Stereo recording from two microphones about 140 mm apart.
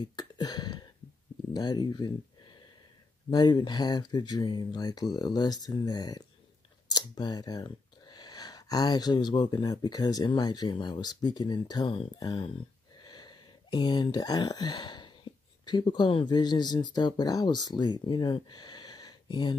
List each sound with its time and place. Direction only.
0.0 s a sound: 30° left (ahead or behind)
1.5 s speech: 30° left (ahead or behind)
3.3 s speech: 30° left (ahead or behind)